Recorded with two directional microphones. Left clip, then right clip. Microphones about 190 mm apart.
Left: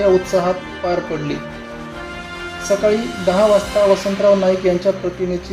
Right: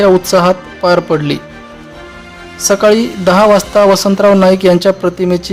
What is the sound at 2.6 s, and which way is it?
Speech, 50° right (ahead or behind).